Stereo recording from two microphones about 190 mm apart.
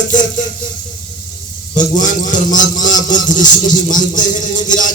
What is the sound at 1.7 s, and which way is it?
Music, 40° left (ahead or behind).